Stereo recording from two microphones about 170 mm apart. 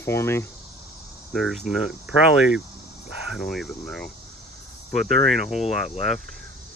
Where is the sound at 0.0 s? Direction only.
15° left (ahead or behind).